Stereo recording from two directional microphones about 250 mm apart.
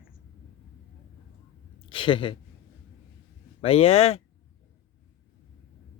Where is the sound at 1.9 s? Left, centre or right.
Left.